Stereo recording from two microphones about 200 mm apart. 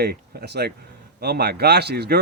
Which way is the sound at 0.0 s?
50° right (ahead or behind).